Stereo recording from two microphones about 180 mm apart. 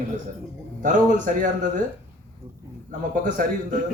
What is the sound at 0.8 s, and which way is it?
Speech, 45° right (ahead or behind).